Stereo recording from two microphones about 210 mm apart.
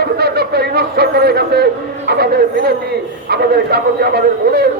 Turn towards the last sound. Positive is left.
turn(degrees=-50)  # may be behind; listen again after turning